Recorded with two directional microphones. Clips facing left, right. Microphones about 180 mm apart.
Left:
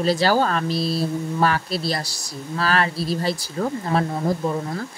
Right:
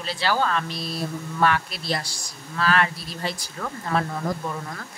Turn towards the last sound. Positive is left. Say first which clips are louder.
# left 5 dB
turn(degrees=25)  # may be behind; listen again after turning